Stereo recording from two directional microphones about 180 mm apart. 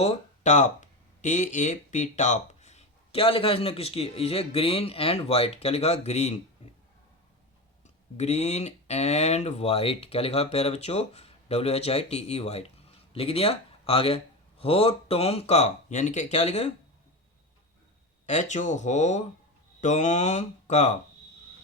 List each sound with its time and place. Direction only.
0.0 s speech: 35° left (ahead or behind)
8.1 s speech: 35° left (ahead or behind)
18.3 s speech: 40° left (ahead or behind)